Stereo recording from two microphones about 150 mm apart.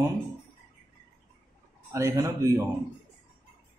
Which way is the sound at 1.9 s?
20° right (ahead or behind).